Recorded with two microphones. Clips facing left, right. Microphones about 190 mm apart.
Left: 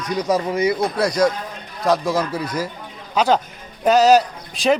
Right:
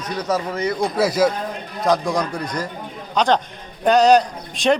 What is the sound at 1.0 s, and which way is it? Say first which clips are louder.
A man's voice: right 3 dB; 5° right (ahead or behind).